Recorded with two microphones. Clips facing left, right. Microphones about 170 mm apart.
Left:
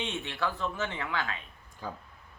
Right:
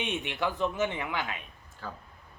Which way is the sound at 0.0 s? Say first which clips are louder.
Right 2 dB; 15° right (ahead or behind).